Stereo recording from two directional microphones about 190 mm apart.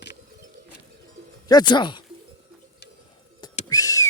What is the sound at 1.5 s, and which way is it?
Speech, 20° left (ahead or behind).